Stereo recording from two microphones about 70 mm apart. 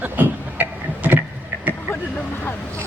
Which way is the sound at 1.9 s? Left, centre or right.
Left.